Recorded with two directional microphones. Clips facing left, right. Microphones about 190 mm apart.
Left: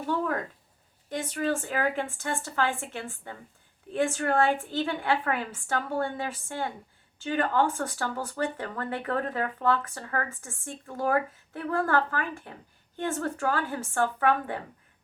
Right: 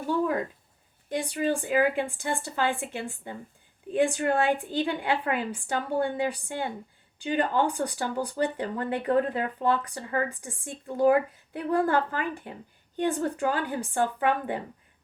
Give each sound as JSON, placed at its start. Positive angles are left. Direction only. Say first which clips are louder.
{"t": 1.1, "sound": "speech", "louder": "right 2 dB", "side_deg": -15}